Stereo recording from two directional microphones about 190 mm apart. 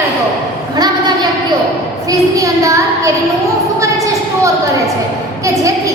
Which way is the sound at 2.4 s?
15° right (ahead or behind).